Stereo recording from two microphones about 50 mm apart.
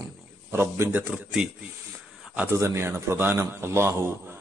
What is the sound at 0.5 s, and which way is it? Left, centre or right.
Speech, right.